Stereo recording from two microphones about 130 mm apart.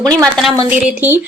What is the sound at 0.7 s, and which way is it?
Speech, 15° right (ahead or behind).